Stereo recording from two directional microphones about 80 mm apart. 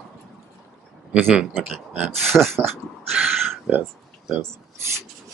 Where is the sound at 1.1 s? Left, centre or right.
Centre.